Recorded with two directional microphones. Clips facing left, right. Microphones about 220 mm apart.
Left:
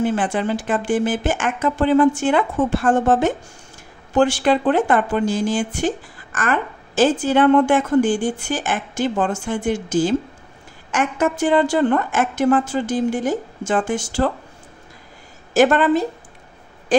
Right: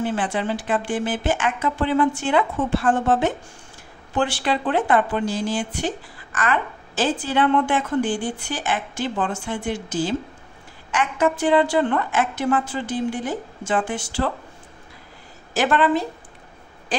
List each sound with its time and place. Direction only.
0.0 s a woman's voice: 45° left (ahead or behind)
15.5 s a woman's voice: 45° left (ahead or behind)